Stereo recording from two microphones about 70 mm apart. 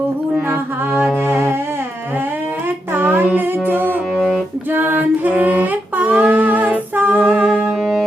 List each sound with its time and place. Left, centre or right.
1.3 s music: right
2.9 s child singing: right
4.7 s music: right